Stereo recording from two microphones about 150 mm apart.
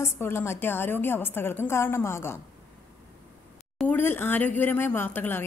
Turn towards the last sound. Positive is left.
turn(degrees=15)  # may be behind; listen again after turning